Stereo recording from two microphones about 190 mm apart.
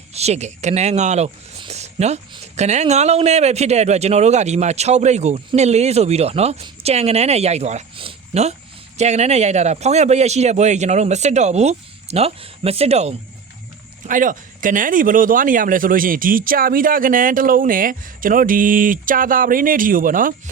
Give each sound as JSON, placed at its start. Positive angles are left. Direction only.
{"t": 0.1, "sound": "speech", "side_deg": -35}
{"t": 14.1, "sound": "speech", "side_deg": -45}